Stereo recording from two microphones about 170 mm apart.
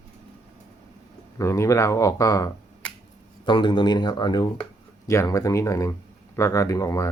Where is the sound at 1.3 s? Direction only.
20° left (ahead or behind).